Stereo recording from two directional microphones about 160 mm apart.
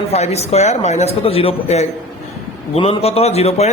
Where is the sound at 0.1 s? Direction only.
40° left (ahead or behind).